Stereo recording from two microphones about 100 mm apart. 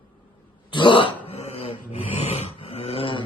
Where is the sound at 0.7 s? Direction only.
55° left (ahead or behind); by 1.8 s 80° left.